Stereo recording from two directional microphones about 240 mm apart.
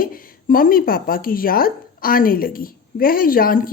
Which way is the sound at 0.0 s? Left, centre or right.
Left.